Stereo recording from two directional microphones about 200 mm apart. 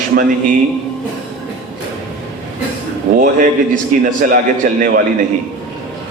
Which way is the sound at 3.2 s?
40° right (ahead or behind).